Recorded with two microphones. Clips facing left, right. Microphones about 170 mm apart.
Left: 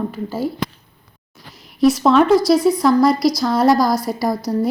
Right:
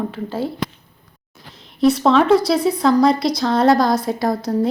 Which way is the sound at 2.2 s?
30° right (ahead or behind).